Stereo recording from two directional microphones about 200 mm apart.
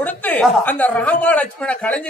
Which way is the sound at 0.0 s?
10° left (ahead or behind).